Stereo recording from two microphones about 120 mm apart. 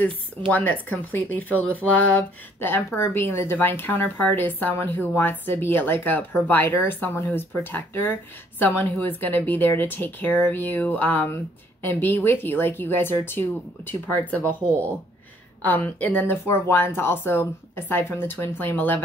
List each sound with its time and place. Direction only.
0.5 s speech: 15° left (ahead or behind)